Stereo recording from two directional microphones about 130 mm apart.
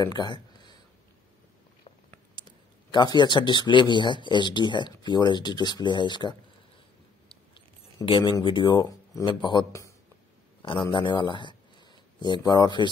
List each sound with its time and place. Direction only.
0.0 s speech: 35° left (ahead or behind)
2.3 s speech: 35° left (ahead or behind)
7.2 s a sound: 40° left (ahead or behind)
9.2 s speech: 35° left (ahead or behind)
9.7 s speech: 20° left (ahead or behind)
10.6 s speech: 35° left (ahead or behind)